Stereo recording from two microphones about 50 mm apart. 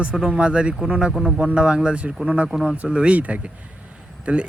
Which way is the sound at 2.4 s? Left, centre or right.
Centre.